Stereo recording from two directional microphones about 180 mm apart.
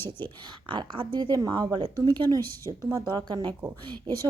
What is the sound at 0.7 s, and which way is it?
A woman's voice, 25° right (ahead or behind).